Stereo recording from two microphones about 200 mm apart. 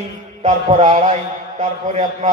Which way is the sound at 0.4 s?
35° right (ahead or behind).